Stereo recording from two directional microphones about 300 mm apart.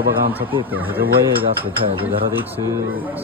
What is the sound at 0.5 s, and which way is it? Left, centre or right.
A man's voice, centre.